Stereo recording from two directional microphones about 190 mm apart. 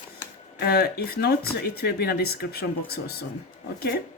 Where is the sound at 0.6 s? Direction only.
55° left (ahead or behind).